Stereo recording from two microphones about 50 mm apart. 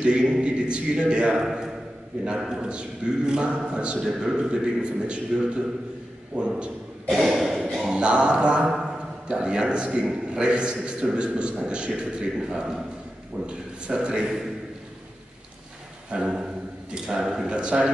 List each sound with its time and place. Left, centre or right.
0.0 s a man's voice: centre
1.4 s a man's voice: centre
4.0 s a man's voice: centre
6.3 s a man's voice: centre
7.1 s a sound: centre
7.9 s a man's voice: centre
16.1 s speech: centre